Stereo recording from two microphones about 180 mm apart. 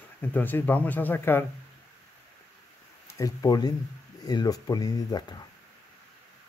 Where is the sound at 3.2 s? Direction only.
20° left (ahead or behind).